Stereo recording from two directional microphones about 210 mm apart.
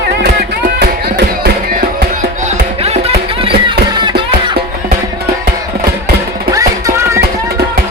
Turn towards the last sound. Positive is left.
turn(degrees=-15)  # may be behind; listen again after turning